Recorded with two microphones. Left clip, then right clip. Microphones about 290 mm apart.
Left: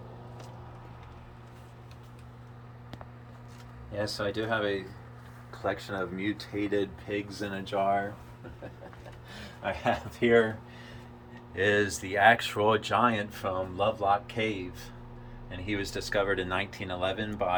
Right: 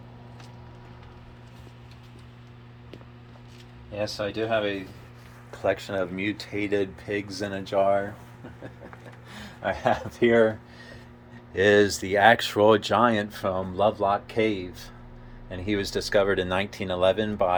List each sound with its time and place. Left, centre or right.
3.9 s speech: centre
5.6 s speech: right
9.6 s speech: right
11.5 s speech: right